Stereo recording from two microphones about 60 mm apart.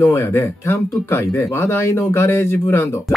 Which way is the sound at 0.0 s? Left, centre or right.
Left.